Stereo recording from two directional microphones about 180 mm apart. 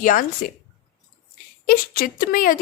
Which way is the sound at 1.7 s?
50° left (ahead or behind).